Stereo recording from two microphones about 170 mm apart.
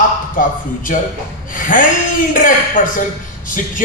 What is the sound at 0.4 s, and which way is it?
A man's voice, 55° left (ahead or behind).